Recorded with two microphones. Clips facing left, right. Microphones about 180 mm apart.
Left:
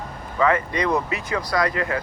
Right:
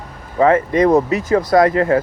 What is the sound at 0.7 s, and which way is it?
Speech, 45° right (ahead or behind).